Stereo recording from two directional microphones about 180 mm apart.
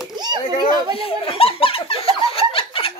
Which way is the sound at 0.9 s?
30° left (ahead or behind).